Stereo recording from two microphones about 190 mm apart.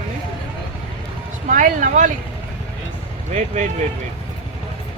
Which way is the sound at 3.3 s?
40° right (ahead or behind).